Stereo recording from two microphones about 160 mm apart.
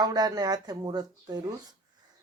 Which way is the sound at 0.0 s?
25° right (ahead or behind).